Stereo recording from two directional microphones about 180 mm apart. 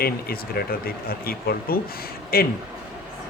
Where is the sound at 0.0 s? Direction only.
55° left (ahead or behind).